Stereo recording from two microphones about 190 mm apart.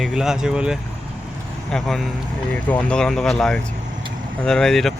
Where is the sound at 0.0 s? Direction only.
Centre (ahead or behind).